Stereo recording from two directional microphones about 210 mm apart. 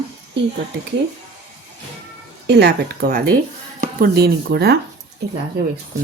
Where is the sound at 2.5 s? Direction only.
50° right (ahead or behind).